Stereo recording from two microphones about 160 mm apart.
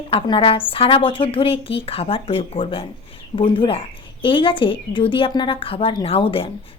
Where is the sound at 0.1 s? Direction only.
35° left (ahead or behind).